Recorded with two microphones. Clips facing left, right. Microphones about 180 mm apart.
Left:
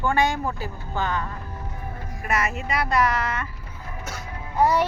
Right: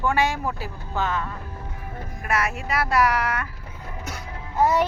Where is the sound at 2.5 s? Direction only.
5° right (ahead or behind).